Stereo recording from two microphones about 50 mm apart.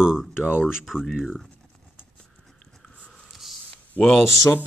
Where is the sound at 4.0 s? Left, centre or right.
Centre.